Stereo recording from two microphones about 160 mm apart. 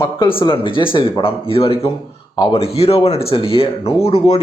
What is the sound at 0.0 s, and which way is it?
Speech, 30° left (ahead or behind).